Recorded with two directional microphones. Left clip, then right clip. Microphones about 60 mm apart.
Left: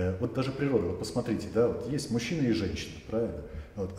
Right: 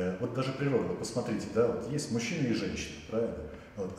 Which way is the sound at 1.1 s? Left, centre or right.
Centre.